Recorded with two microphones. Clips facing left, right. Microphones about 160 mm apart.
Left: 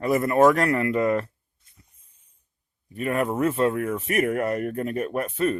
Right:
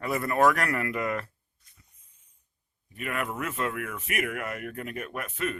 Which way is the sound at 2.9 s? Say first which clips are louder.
Left 8 dB; 35° left (ahead or behind).